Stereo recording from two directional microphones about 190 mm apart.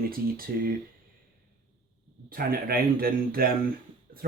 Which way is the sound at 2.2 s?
50° right (ahead or behind).